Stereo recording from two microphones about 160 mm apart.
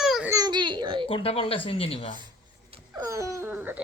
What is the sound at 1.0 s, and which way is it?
A man's voice, 35° left (ahead or behind).